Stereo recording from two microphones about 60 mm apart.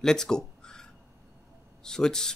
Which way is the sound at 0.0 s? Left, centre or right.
Centre.